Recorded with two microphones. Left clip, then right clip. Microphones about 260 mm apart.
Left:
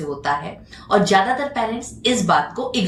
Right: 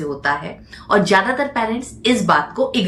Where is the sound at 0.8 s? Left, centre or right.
Centre.